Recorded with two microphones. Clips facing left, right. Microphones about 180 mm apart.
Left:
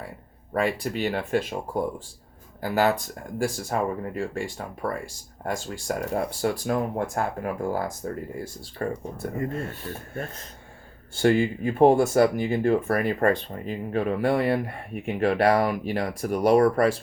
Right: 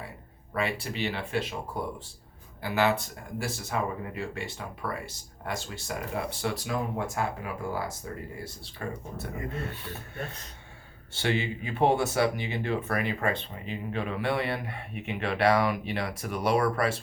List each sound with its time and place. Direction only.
0.5 s speech: 45° left (ahead or behind)
2.6 s speech: 45° left (ahead or behind)